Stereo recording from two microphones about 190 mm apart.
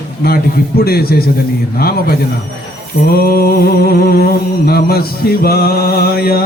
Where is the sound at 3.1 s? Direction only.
50° left (ahead or behind).